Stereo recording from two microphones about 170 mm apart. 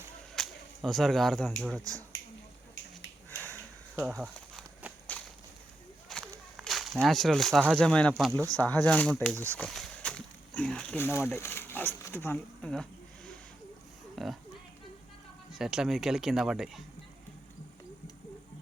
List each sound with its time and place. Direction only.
0.3 s speech: centre (ahead or behind)
3.2 s sniff: 10° left (ahead or behind)
4.1 s walk: centre (ahead or behind)
6.6 s a sound: centre (ahead or behind)
7.0 s speech: centre (ahead or behind)
8.3 s speech: 20° right (ahead or behind)
8.6 s speech: 5° left (ahead or behind)
9.3 s speech: 15° right (ahead or behind)
9.6 s a sound: centre (ahead or behind)
14.2 s speech: centre (ahead or behind)
15.5 s speech: 5° right (ahead or behind)